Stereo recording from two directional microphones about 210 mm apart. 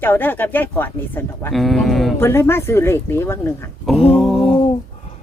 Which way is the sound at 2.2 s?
10° left (ahead or behind).